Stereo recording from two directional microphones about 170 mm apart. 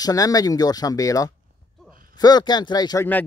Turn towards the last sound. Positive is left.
turn(degrees=25)  # may be behind; listen again after turning